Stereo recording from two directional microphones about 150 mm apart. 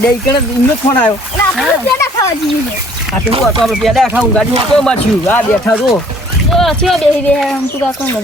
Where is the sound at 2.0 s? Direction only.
20° left (ahead or behind).